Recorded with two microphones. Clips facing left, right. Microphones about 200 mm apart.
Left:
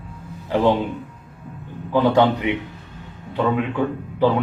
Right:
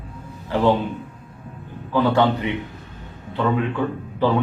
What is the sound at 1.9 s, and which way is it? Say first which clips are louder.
Speech: left 2 dB; 15° left (ahead or behind).